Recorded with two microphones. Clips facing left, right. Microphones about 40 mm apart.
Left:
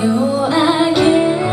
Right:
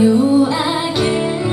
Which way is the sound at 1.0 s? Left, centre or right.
Left.